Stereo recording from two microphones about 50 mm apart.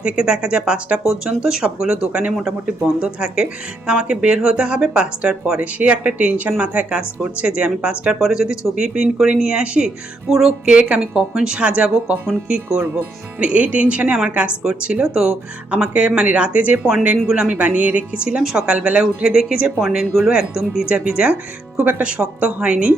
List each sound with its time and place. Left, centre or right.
0.0 s speech: right
8.2 s speech: centre
17.6 s speech: right
19.3 s speech: centre
20.8 s speech: right
21.8 s speech: right
22.0 s speech: right